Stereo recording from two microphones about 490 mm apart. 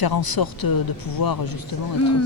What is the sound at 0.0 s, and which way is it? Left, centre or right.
Speech, left.